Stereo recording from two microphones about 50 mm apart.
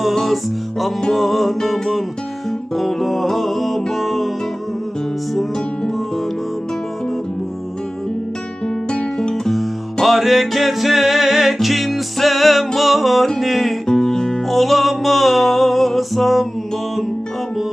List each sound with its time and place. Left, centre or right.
0.0 s music: centre
8.6 s music: centre
9.3 s music: centre
13.8 s music: centre
14.4 s music: centre